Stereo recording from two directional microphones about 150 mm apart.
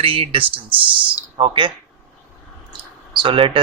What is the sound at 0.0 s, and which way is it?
A man's voice, 40° right (ahead or behind).